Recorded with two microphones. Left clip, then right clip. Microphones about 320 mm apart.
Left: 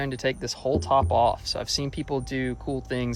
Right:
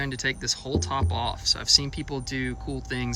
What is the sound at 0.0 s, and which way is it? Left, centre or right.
Speech, centre.